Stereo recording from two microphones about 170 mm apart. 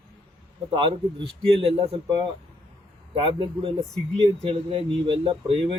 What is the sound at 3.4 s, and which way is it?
Speech, 35° right (ahead or behind).